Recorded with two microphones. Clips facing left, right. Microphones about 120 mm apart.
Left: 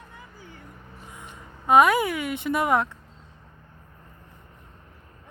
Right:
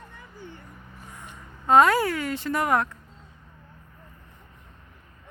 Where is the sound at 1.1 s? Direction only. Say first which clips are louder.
Left 1 dB; 15° left (ahead or behind).